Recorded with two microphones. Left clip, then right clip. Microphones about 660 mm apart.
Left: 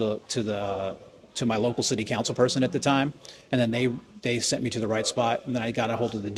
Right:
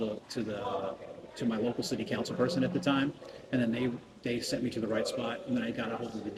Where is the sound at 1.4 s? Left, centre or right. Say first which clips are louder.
Left 7 dB; left.